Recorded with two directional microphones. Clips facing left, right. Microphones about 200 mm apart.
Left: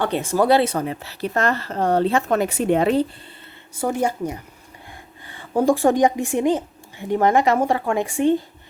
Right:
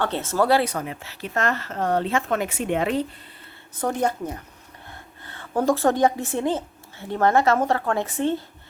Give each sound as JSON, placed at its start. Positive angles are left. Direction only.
{"t": 0.0, "sound": "a woman's voice", "side_deg": 15}
{"t": 3.8, "sound": "a woman's voice", "side_deg": 10}